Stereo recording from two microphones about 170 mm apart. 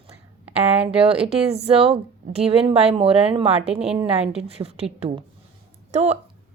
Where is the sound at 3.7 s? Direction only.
5° right (ahead or behind).